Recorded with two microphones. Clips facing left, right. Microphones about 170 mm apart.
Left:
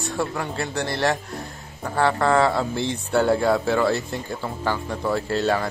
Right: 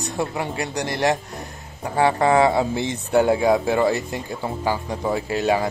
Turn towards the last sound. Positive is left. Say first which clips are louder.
# right 2 dB
turn(degrees=-15)  # may be behind; listen again after turning